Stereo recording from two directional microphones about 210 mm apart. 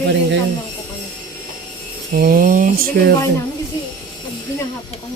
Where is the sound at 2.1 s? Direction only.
45° right (ahead or behind).